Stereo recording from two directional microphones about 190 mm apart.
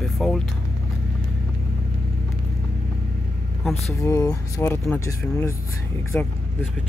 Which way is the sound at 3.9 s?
15° left (ahead or behind).